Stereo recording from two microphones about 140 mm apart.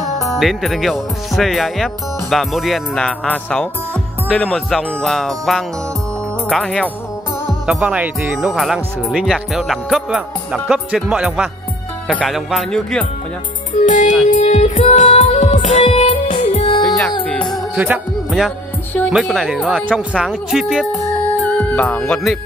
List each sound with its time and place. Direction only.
0.2 s speech: centre (ahead or behind)
7.4 s speech: 5° right (ahead or behind)
13.7 s music: 60° left (ahead or behind); by 16.8 s 45° left (ahead or behind)
16.8 s music: 5° left (ahead or behind)
17.7 s music: 10° right (ahead or behind)
19.0 s speech: centre (ahead or behind)